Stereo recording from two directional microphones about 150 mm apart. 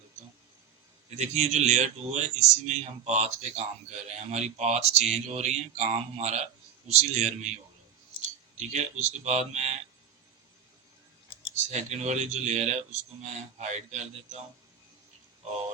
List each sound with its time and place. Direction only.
1.2 s a man's voice: 50° right (ahead or behind)
8.5 s a man's voice: 50° right (ahead or behind)
11.5 s a man's voice: 50° right (ahead or behind)